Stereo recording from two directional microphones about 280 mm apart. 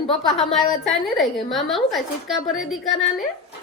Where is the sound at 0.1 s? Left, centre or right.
Centre.